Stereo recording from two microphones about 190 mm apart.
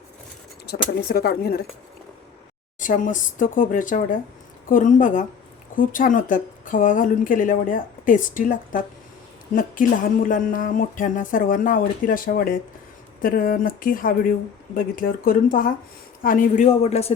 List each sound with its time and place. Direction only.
0.7 s speech: 55° left (ahead or behind)
2.7 s a man's voice: 45° left (ahead or behind)